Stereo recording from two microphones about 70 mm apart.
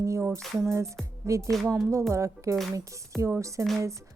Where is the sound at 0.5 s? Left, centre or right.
Right.